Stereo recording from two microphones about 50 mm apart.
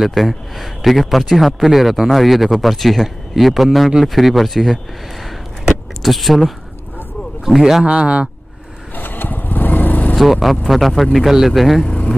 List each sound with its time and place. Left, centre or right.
0.0 s speech: centre
6.0 s speech: centre
7.8 s speech: right
8.9 s vehicle: left
10.1 s speech: centre
11.8 s vehicle: left